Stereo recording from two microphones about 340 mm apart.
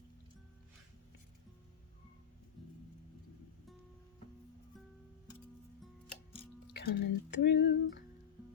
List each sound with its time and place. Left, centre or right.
6.7 s music: left